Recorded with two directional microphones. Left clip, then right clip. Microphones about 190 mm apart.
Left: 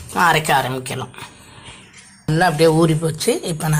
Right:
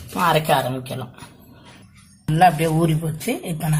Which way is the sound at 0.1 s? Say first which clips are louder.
Left 3 dB; 15° left (ahead or behind).